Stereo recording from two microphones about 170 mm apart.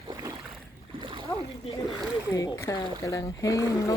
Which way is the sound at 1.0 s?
30° right (ahead or behind).